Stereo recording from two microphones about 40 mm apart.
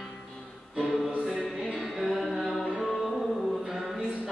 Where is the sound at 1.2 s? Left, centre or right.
Centre.